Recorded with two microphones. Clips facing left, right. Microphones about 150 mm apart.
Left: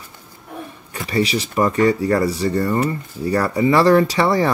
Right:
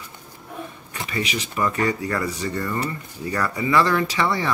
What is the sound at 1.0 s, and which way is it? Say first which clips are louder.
Mantra: left 8 dB; 35° left (ahead or behind).